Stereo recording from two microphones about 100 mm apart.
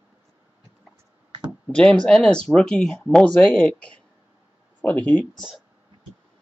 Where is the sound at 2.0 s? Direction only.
10° left (ahead or behind).